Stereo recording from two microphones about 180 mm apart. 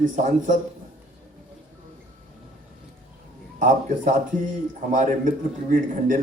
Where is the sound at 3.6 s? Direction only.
45° right (ahead or behind).